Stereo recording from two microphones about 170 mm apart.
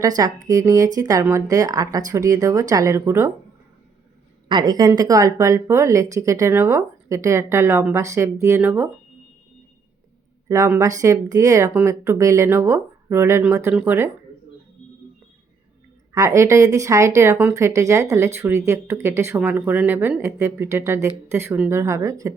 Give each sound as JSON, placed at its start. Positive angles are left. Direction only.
{"t": 0.2, "sound": "speech", "side_deg": -20}
{"t": 4.4, "sound": "speech", "side_deg": -25}
{"t": 10.5, "sound": "speech", "side_deg": -15}
{"t": 16.1, "sound": "speech", "side_deg": -20}